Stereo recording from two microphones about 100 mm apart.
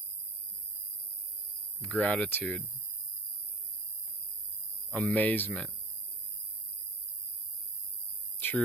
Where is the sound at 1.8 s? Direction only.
15° left (ahead or behind).